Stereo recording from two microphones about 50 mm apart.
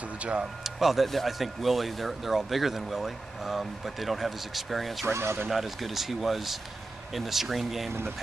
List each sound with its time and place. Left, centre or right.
0.2 s speech: right
0.7 s speech: centre
5.0 s speech: right
5.5 s speech: centre